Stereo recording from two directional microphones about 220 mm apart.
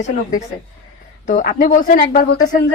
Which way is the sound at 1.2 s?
35° left (ahead or behind).